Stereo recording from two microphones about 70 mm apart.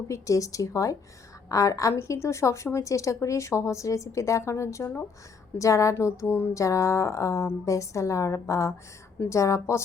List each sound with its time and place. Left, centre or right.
0.1 s a woman's voice: left